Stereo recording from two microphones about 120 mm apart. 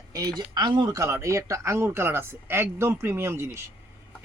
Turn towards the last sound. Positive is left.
turn(degrees=-20)  # may be behind; listen again after turning